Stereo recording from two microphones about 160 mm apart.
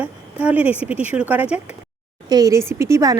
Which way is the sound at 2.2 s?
25° right (ahead or behind).